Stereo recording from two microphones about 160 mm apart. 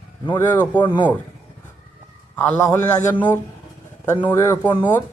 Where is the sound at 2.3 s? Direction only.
10° left (ahead or behind).